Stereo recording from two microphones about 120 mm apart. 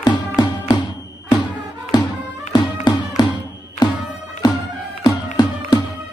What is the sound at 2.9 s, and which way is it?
Music, 35° left (ahead or behind).